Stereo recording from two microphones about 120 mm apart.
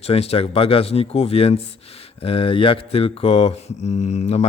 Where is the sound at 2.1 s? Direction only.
50° left (ahead or behind); by 4.5 s 70° left (ahead or behind).